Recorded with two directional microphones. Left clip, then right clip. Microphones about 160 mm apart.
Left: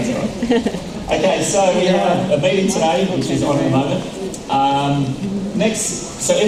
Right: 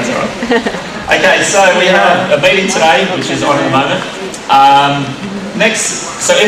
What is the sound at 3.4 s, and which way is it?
A man's voice, 35° right (ahead or behind).